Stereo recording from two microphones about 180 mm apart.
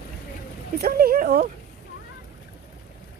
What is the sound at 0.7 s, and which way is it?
Speech, 55° right (ahead or behind).